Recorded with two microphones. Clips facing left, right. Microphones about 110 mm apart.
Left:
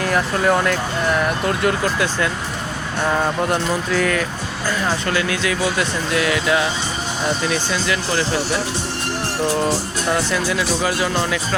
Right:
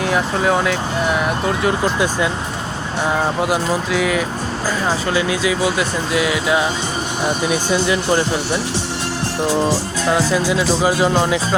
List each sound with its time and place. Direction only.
0.0 s speech: 5° right (ahead or behind); by 8.2 s 20° right (ahead or behind)
10.3 s speech: 20° right (ahead or behind)